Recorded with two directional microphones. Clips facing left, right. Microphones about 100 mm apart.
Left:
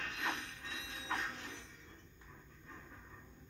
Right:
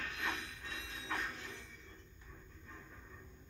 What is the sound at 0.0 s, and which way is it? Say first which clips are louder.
Ratchet: left 1 dB; 30° left (ahead or behind).